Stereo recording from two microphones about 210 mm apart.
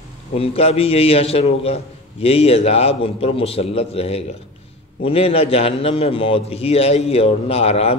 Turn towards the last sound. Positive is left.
turn(degrees=30)  # may be behind; listen again after turning